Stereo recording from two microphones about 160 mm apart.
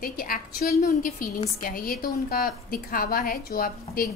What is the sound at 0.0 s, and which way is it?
A woman's voice, 65° left (ahead or behind).